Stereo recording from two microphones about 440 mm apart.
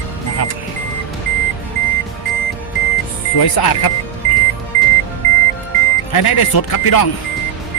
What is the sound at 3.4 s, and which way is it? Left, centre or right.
Speech, left.